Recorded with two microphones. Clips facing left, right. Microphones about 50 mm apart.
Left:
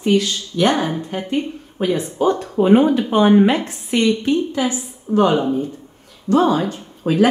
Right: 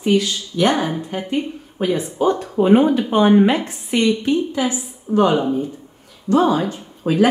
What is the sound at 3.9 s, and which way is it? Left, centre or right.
Speech, left.